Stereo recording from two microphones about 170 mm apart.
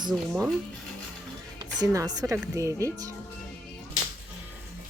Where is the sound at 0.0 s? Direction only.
25° right (ahead or behind).